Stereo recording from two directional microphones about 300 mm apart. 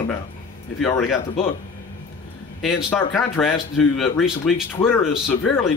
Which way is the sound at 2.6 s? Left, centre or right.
Centre.